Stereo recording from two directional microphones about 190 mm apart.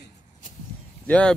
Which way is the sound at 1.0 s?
5° left (ahead or behind).